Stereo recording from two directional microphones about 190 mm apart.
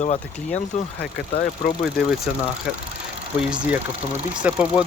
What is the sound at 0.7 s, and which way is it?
Speech, 40° left (ahead or behind).